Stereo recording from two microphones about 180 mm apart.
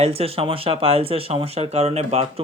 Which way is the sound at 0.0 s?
35° right (ahead or behind).